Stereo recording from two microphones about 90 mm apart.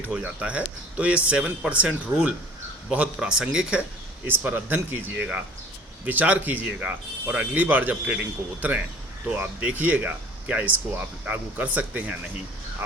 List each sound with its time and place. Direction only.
0.2 s speech: 15° right (ahead or behind)
4.3 s speech: 20° right (ahead or behind)